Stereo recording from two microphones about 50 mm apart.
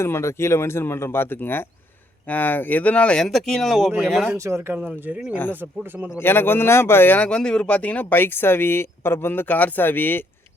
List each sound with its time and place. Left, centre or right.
0.0 s speech: left
3.2 s speech: centre
4.3 s speech: right
4.7 s speech: right
6.1 s speech: left
7.3 s speech: centre
7.8 s speech: left
8.1 s speech: left